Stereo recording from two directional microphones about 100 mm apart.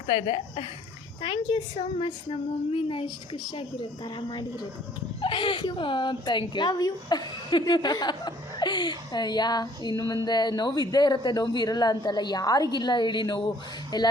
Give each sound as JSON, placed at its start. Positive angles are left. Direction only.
{"t": 0.1, "sound": "a woman's voice", "side_deg": 75}
{"t": 2.3, "sound": "a woman's voice", "side_deg": 60}
{"t": 5.2, "sound": "a woman's voice", "side_deg": 60}